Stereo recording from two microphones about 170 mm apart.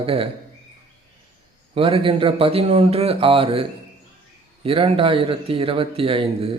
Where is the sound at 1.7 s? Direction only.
35° right (ahead or behind).